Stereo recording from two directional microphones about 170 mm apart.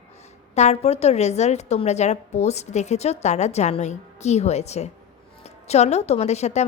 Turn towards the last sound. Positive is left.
turn(degrees=40)  # may be behind; listen again after turning